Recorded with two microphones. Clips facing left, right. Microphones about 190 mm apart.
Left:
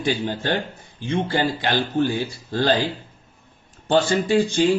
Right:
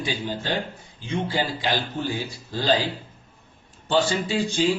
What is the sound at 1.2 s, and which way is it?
Speech, 60° left (ahead or behind).